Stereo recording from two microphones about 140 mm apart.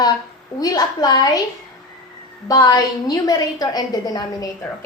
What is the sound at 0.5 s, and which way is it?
Speech, 25° left (ahead or behind).